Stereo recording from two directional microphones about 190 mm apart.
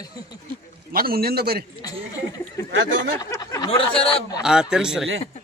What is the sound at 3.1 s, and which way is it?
Speech, 20° left (ahead or behind).